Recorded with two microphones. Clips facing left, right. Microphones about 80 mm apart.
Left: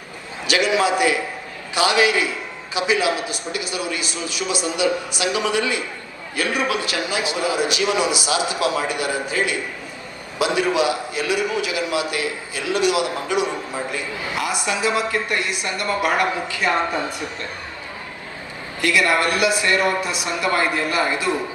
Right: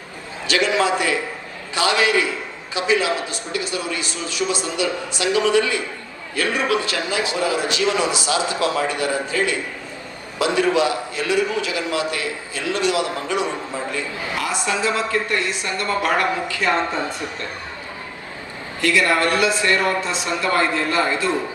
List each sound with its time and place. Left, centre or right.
0.4 s a man's voice: centre
18.8 s a man's voice: centre